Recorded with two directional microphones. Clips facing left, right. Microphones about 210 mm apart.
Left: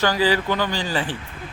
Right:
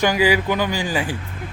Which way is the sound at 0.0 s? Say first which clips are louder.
Right 2 dB; 15° right (ahead or behind).